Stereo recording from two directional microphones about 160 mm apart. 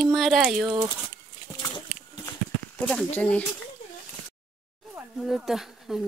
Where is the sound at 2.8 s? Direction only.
5° left (ahead or behind).